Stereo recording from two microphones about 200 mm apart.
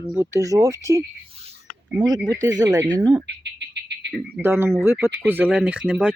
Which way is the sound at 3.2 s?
60° right (ahead or behind).